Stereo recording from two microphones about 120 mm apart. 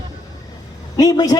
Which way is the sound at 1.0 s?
30° left (ahead or behind).